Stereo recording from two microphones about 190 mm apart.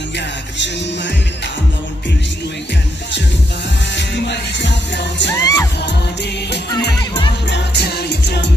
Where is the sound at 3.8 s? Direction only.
65° left (ahead or behind).